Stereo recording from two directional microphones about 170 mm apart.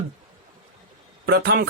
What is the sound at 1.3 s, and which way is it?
Speech, 70° right (ahead or behind).